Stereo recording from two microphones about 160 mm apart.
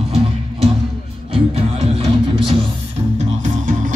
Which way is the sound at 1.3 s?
40° right (ahead or behind).